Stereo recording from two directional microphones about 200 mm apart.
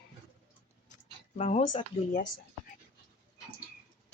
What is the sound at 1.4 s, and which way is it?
Speech, 30° left (ahead or behind).